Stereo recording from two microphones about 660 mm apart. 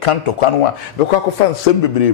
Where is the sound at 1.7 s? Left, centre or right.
Left.